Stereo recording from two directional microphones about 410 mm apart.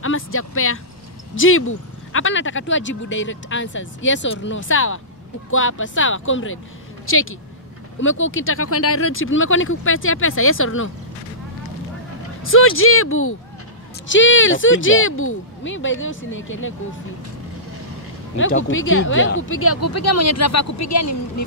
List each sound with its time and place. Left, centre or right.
0.0 s speech: left
12.4 s speech: left
18.4 s speech: left